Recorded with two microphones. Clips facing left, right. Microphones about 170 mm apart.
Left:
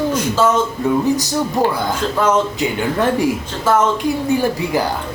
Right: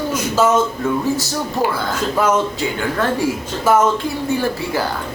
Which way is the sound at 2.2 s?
10° right (ahead or behind).